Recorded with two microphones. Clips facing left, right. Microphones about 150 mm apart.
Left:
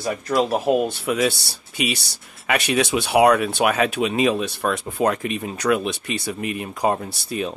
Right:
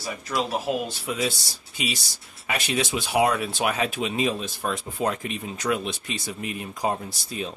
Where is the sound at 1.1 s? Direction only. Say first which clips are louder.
Left 4 dB; 70° left (ahead or behind).